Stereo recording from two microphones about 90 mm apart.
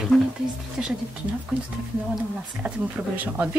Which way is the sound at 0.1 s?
5° left (ahead or behind).